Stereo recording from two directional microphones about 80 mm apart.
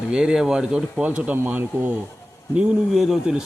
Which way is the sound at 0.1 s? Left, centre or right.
Centre.